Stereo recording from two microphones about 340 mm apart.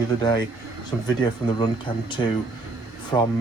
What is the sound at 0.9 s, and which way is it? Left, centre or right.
Speech, centre.